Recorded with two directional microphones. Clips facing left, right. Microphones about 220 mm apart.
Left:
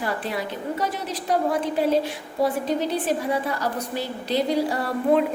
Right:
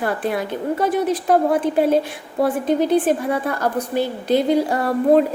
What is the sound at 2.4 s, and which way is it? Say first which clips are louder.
A woman's voice: right 5 dB; 55° right (ahead or behind).